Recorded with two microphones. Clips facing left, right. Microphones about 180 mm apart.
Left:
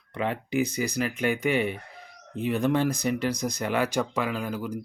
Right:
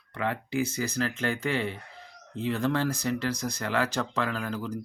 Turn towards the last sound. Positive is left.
turn(degrees=10)  # may be behind; listen again after turning